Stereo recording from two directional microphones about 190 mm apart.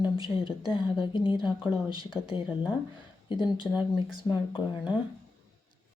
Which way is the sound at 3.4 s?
25° left (ahead or behind).